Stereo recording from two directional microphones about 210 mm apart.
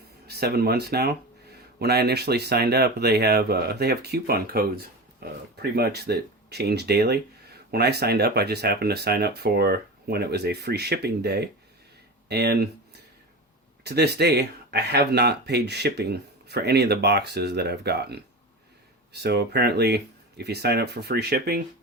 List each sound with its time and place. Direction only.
0.3 s speech: 50° right (ahead or behind)